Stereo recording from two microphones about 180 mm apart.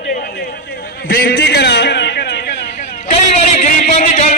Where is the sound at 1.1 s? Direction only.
60° left (ahead or behind).